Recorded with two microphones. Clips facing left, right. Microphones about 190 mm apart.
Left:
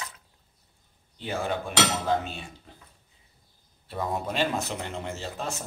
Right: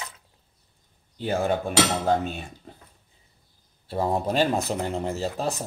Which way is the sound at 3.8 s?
30° right (ahead or behind).